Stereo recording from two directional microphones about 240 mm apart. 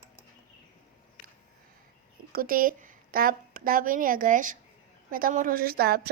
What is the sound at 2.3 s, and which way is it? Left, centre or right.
A woman's voice, right.